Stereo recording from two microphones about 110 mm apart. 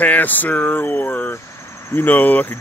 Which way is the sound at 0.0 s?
15° left (ahead or behind).